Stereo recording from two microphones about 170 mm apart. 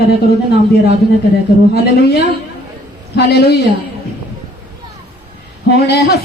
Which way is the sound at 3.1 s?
75° left (ahead or behind).